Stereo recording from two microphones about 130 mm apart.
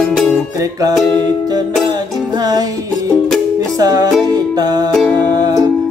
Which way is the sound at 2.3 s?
30° right (ahead or behind).